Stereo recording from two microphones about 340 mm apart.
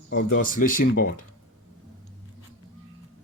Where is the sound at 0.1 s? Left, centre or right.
Left.